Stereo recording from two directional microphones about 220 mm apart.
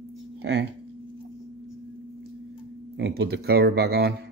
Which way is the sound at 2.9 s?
45° right (ahead or behind).